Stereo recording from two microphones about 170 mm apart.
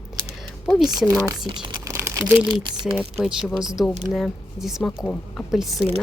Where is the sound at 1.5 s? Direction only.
35° left (ahead or behind).